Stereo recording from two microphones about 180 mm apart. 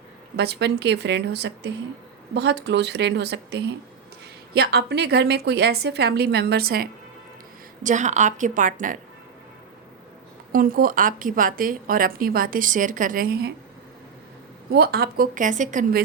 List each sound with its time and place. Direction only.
0.3 s a woman's voice: 70° right (ahead or behind)
7.9 s a woman's voice: 40° right (ahead or behind)
10.5 s a woman's voice: 50° right (ahead or behind)
14.7 s a woman's voice: 60° right (ahead or behind)